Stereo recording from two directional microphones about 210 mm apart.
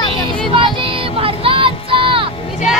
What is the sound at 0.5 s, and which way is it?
Child singing, 25° right (ahead or behind).